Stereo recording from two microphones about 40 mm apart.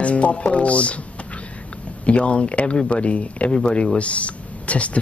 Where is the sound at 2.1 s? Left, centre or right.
Left.